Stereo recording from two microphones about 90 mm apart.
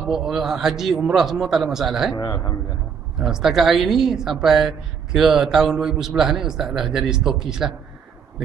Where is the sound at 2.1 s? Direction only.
45° left (ahead or behind).